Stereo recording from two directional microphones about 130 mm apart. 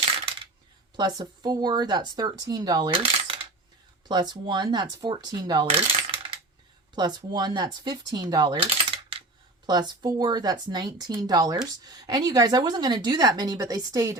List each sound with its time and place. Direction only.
0.9 s a woman's voice: 35° right (ahead or behind)
2.9 s coin: 45° right (ahead or behind)
4.1 s a woman's voice: 35° right (ahead or behind)
5.7 s coin: 45° right (ahead or behind)
6.9 s a woman's voice: 35° right (ahead or behind)
8.5 s coin: 45° right (ahead or behind)
9.6 s a woman's voice: 35° right (ahead or behind)